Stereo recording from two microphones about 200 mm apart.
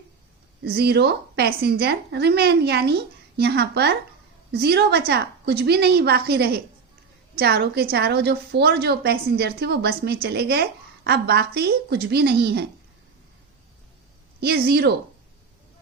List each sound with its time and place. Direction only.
0.6 s a woman's voice: 50° right (ahead or behind)
14.4 s a woman's voice: 55° right (ahead or behind)